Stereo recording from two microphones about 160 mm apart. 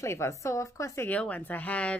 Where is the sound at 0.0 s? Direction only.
15° left (ahead or behind).